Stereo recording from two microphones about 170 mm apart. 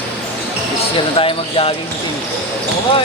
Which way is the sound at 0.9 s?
30° left (ahead or behind).